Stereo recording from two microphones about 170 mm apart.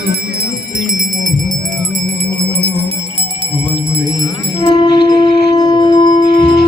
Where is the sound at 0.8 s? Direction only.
50° right (ahead or behind).